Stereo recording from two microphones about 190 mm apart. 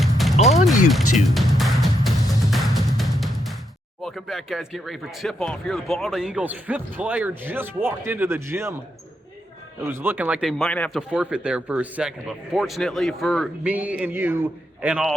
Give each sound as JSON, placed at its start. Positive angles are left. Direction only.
{"t": 0.0, "sound": "music", "side_deg": 0}
{"t": 0.3, "sound": "music", "side_deg": 35}
{"t": 0.6, "sound": "music", "side_deg": 0}
{"t": 4.0, "sound": "speech", "side_deg": 0}
{"t": 9.8, "sound": "speech", "side_deg": -10}
{"t": 10.6, "sound": "speech", "side_deg": 5}
{"t": 11.1, "sound": "speech", "side_deg": -5}